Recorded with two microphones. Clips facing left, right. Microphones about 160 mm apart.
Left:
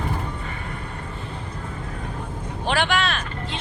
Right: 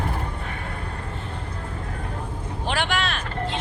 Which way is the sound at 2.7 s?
90° left.